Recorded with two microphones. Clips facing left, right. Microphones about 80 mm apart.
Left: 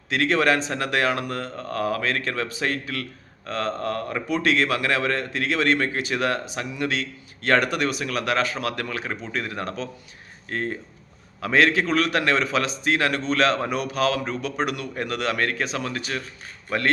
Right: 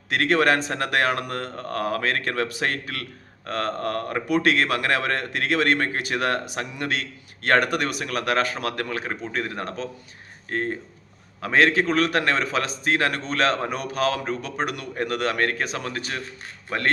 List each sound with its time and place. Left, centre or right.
0.1 s a man's voice: right